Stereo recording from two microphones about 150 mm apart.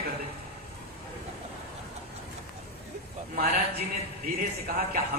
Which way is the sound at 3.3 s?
90° right.